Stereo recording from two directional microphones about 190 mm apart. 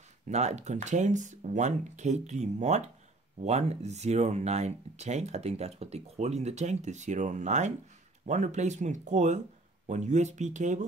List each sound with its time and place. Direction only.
0.3 s speech: 35° right (ahead or behind)